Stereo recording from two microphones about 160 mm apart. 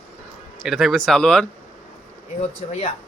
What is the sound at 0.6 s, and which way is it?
Speech, centre (ahead or behind).